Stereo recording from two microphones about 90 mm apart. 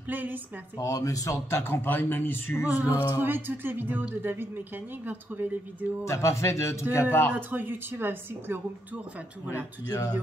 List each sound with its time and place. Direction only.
0.1 s speech: 20° right (ahead or behind)
0.7 s a man's voice: 40° left (ahead or behind)
1.6 s speech: 25° left (ahead or behind)
3.1 s speech: 25° right (ahead or behind)
6.0 s a man's voice: 35° left (ahead or behind)
7.3 s speech: 20° right (ahead or behind)
9.8 s speech: 45° left (ahead or behind)